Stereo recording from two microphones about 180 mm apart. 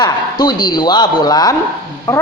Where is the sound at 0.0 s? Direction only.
25° left (ahead or behind).